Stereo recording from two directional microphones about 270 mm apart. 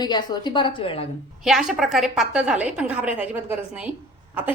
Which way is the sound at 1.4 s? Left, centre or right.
Centre.